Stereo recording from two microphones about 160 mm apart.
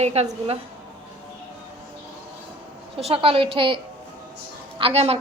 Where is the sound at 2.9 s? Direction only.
40° right (ahead or behind).